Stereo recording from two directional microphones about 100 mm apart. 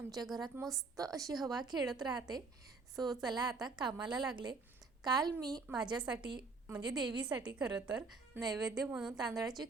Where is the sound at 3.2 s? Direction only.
40° right (ahead or behind).